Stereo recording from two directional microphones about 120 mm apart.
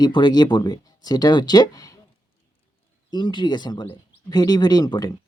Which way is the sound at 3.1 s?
40° left (ahead or behind).